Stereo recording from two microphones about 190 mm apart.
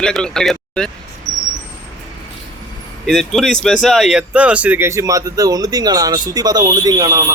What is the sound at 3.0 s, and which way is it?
Speech, centre (ahead or behind).